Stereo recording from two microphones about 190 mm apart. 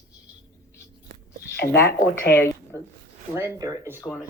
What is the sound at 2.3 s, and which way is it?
Speech, 15° left (ahead or behind).